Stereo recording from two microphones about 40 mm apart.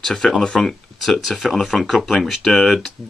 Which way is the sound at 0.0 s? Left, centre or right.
Centre.